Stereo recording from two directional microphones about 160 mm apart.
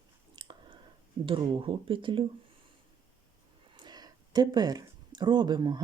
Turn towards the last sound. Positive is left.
turn(degrees=-25)  # may be behind; listen again after turning